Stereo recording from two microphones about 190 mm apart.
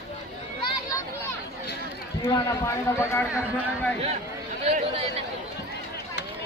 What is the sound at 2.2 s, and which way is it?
A man's voice, 15° left (ahead or behind).